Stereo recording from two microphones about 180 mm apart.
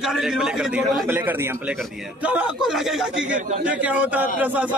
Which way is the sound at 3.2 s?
45° right (ahead or behind).